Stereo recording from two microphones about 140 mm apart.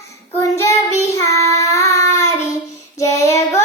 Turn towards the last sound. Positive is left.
turn(degrees=20)  # may be behind; listen again after turning